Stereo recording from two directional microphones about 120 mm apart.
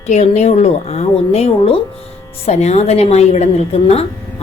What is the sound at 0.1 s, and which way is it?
A woman's voice, 70° left (ahead or behind).